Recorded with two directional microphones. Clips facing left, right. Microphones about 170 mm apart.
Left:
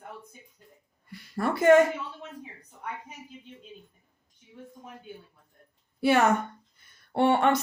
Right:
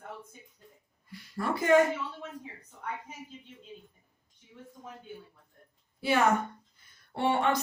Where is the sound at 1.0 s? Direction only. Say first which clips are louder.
Left 4 dB; 65° left (ahead or behind).